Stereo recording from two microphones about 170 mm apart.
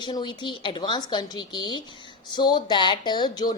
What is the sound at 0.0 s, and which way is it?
Speech, 25° left (ahead or behind).